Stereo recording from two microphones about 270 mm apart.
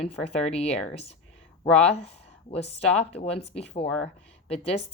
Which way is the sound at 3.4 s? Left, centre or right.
Left.